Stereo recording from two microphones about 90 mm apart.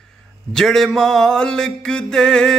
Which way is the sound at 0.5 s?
5° left (ahead or behind).